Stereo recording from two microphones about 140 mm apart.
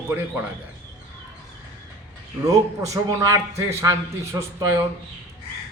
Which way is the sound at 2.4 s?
25° right (ahead or behind).